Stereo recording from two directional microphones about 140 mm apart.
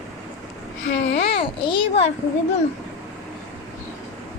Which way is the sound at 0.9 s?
45° left (ahead or behind).